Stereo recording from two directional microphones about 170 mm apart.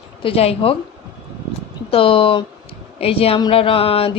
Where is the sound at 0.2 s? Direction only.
35° left (ahead or behind).